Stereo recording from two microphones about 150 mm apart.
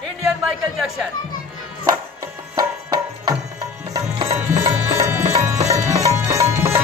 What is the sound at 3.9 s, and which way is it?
Music, 25° right (ahead or behind).